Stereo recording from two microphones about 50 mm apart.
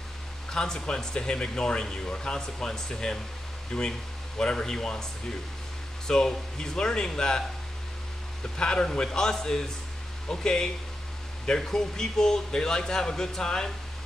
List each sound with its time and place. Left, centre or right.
0.5 s speech: centre
6.0 s speech: centre
8.5 s speech: centre